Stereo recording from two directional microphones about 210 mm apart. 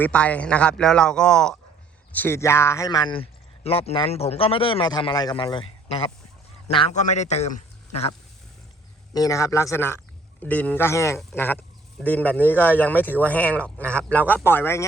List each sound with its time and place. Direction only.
0.0 s a man's voice: 5° left (ahead or behind); by 8.1 s 30° left (ahead or behind)
9.1 s speech: 15° left (ahead or behind)